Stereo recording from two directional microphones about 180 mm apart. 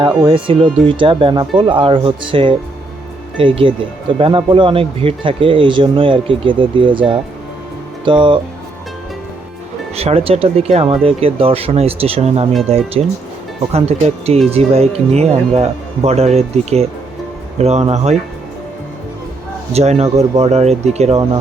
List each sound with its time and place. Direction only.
0.0 s speech: 30° right (ahead or behind)
9.9 s speech: 35° right (ahead or behind)
19.7 s speech: 35° right (ahead or behind)